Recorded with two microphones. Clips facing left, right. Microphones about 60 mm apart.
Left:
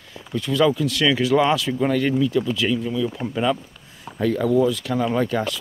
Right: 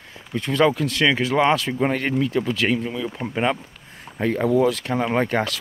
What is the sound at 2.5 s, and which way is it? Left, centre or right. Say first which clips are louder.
Speech: right 1 dB; right.